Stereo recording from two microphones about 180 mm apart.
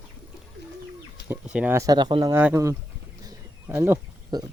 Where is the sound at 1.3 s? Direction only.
5° right (ahead or behind).